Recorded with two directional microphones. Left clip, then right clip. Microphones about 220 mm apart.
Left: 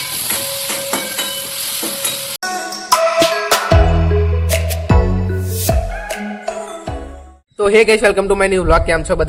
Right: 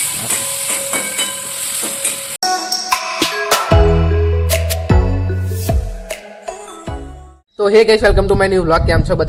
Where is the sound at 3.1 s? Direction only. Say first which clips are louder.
Left 2 dB; centre (ahead or behind).